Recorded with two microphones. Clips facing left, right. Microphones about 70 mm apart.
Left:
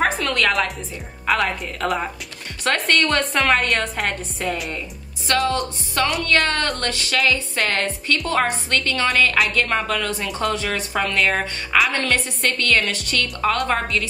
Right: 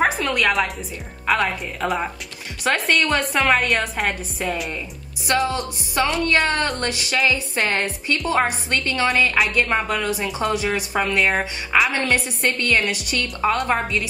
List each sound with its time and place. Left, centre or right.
0.0 s a sound: centre
1.2 s a woman's voice: centre
5.9 s a woman's voice: centre